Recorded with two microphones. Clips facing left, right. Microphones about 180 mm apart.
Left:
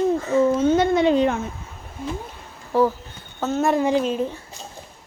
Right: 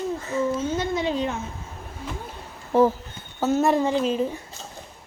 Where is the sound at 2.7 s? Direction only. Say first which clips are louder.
Right 1 dB; 20° right (ahead or behind).